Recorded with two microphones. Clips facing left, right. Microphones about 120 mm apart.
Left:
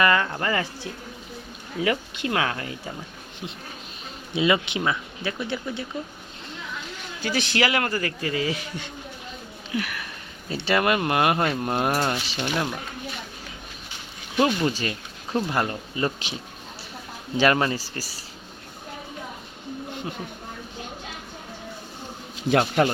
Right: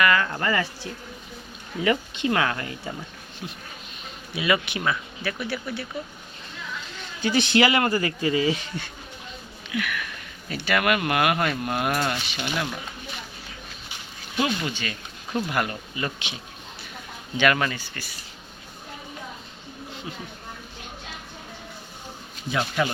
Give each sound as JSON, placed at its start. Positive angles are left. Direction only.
{"t": 0.0, "sound": "speech", "side_deg": 25}
{"t": 0.3, "sound": "speech", "side_deg": 10}
{"t": 4.4, "sound": "speech", "side_deg": 25}
{"t": 7.2, "sound": "speech", "side_deg": 0}
{"t": 8.6, "sound": "speech", "side_deg": 15}
{"t": 9.7, "sound": "speech", "side_deg": 35}
{"t": 14.3, "sound": "speech", "side_deg": 40}
{"t": 17.3, "sound": "speech", "side_deg": 30}
{"t": 22.4, "sound": "speech", "side_deg": 55}